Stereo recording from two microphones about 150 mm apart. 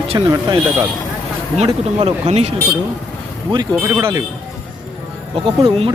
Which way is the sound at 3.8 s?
15° right (ahead or behind).